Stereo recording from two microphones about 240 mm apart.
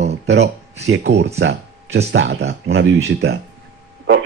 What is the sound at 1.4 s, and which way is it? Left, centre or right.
Speech, right.